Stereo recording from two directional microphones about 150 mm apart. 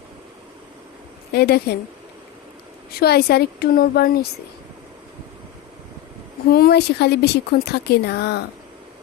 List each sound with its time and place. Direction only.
1.3 s speech: 90° left
2.9 s speech: 90° left
6.5 s speech: 90° left